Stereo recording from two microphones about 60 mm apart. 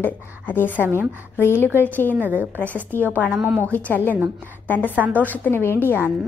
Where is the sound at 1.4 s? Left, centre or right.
Left.